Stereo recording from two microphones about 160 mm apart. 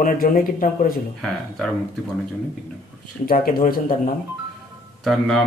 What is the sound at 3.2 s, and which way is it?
Speech, 65° left (ahead or behind).